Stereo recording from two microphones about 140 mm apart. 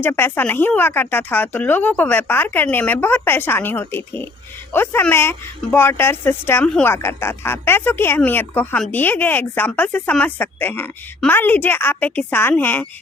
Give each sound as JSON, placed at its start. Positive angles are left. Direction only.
{"t": 0.0, "sound": "speech", "side_deg": 15}